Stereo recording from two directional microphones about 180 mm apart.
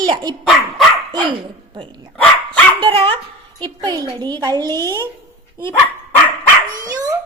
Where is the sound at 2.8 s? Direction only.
30° right (ahead or behind).